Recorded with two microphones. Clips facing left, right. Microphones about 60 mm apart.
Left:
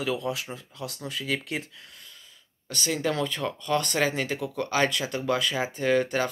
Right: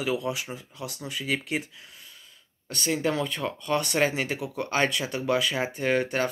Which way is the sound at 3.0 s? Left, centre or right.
Centre.